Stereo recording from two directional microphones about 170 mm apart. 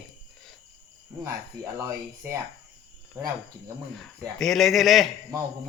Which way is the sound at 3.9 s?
Centre (ahead or behind).